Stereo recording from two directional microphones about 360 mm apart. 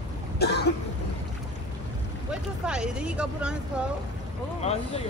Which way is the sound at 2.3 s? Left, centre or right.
Centre.